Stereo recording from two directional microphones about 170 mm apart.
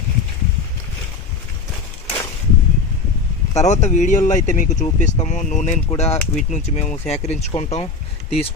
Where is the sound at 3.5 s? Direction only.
45° left (ahead or behind).